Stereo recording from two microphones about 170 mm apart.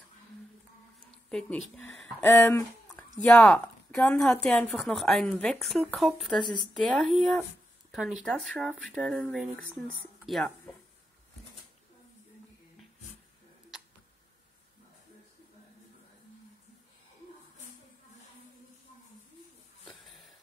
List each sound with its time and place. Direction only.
1.3 s speech: 5° left (ahead or behind)
2.2 s a woman's voice: 15° left (ahead or behind)
6.4 s speech: 25° left (ahead or behind)
6.7 s a woman's voice: centre (ahead or behind)
19.8 s a sound: centre (ahead or behind)